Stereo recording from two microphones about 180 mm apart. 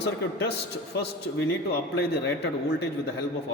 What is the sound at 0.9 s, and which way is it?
A man's voice, 65° left (ahead or behind).